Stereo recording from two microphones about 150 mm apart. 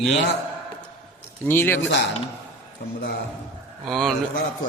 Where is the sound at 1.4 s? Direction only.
15° left (ahead or behind).